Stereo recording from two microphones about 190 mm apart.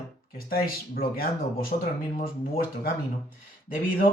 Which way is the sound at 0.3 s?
50° left (ahead or behind).